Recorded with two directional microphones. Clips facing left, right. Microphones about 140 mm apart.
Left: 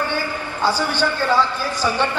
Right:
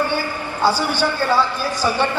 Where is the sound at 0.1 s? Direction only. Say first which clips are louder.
Right 1 dB; 10° right (ahead or behind).